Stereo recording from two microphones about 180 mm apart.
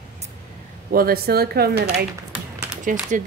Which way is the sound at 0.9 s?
55° right (ahead or behind).